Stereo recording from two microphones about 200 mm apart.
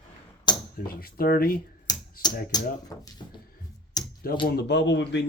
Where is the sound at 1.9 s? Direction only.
20° left (ahead or behind).